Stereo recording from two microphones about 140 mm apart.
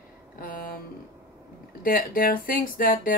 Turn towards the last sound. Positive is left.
turn(degrees=90)